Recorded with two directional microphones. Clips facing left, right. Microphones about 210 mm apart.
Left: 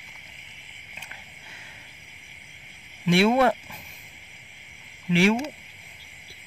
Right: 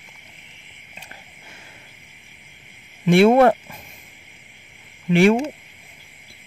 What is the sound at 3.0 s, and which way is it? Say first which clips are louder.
Speech: right 7 dB; 50° right (ahead or behind).